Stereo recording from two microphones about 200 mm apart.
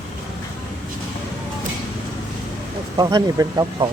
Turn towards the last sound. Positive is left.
turn(degrees=-15)  # may be behind; listen again after turning